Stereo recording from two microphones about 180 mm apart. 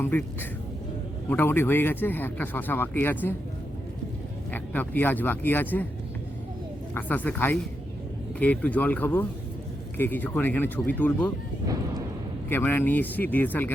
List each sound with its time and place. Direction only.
0.0 s speech: 10° left (ahead or behind)
1.3 s speech: 10° left (ahead or behind)
4.5 s speech: 10° left (ahead or behind)
6.9 s speech: 10° left (ahead or behind)
11.6 s a sound: 20° right (ahead or behind)
12.5 s speech: 10° left (ahead or behind)